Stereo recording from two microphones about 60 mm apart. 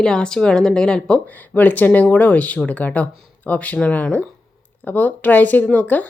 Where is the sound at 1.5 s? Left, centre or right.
Left.